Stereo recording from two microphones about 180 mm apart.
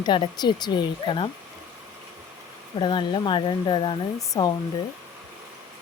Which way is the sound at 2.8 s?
25° left (ahead or behind).